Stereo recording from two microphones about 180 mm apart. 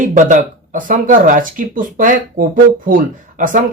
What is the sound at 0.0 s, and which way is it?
Speech, 45° right (ahead or behind).